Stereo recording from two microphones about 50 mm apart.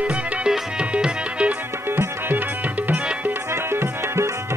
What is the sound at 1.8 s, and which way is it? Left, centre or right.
Music, right.